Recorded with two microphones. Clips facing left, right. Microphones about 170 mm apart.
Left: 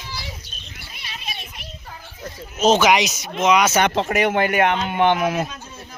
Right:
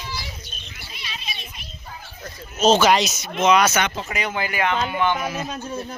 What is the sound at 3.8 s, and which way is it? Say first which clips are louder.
Speech: left 8 dB; 60° left (ahead or behind).